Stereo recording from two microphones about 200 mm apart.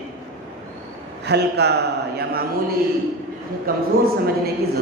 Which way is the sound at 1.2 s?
55° right (ahead or behind).